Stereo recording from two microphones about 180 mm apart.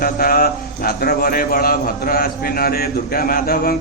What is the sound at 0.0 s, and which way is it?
A man's voice, 55° left (ahead or behind).